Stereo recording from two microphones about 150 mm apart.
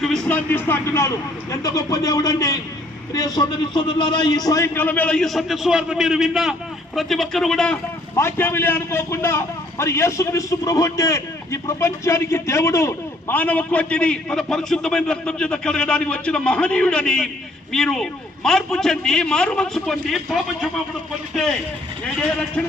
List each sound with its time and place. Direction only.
0.0 s a man's voice: 5° left (ahead or behind)
8.1 s a man's voice: 15° left (ahead or behind)
22.0 s a man's voice: 5° left (ahead or behind)